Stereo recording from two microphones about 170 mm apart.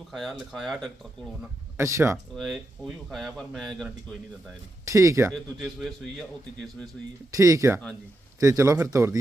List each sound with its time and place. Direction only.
0.1 s speech: centre (ahead or behind)
1.8 s speech: 15° right (ahead or behind)
2.3 s speech: centre (ahead or behind)
4.9 s speech: 20° right (ahead or behind)
5.5 s speech: centre (ahead or behind)
7.3 s speech: 20° right (ahead or behind)